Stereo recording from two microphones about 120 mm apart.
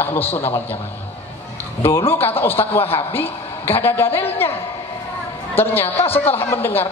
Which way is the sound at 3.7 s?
20° left (ahead or behind).